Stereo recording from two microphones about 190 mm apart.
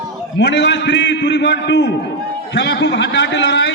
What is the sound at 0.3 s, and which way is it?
A man's voice, 70° left (ahead or behind).